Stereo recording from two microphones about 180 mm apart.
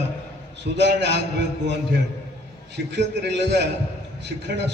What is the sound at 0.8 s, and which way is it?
Speech, 70° right (ahead or behind).